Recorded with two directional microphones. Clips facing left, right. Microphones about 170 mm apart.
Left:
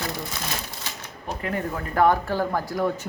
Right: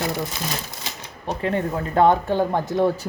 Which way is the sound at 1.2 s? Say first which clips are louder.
Right 5 dB; 30° right (ahead or behind).